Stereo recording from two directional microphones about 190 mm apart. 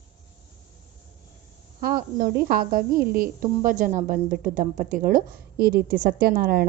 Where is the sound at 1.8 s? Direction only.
50° right (ahead or behind).